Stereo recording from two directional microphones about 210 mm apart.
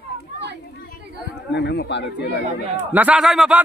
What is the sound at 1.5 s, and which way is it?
Speech, 50° left (ahead or behind).